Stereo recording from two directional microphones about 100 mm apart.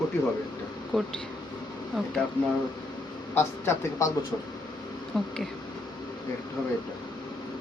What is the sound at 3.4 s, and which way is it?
Speech, 25° left (ahead or behind).